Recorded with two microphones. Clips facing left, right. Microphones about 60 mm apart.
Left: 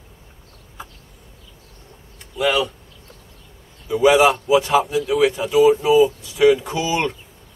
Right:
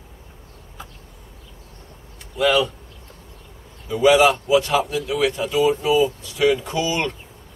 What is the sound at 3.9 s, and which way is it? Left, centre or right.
Speech, centre.